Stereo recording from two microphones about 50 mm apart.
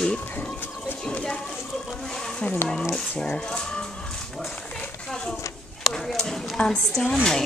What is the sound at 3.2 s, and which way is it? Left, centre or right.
Speech, centre.